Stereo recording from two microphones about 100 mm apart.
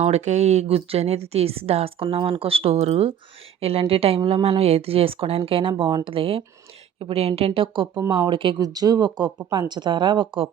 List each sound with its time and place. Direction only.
0.0 s speech: 90° right; by 6.4 s 60° right (ahead or behind)
7.0 s speech: 75° right (ahead or behind); by 8.5 s 55° right (ahead or behind)
8.5 s speech: 40° right (ahead or behind)